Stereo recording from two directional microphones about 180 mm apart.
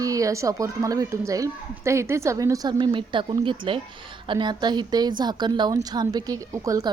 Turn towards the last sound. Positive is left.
turn(degrees=-20)  # may be behind; listen again after turning